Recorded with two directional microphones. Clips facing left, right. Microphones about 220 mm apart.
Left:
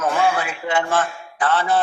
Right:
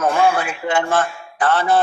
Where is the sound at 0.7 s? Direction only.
45° right (ahead or behind).